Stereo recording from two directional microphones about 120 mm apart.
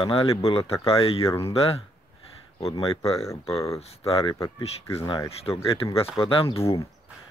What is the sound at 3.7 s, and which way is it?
Speech, 60° left (ahead or behind).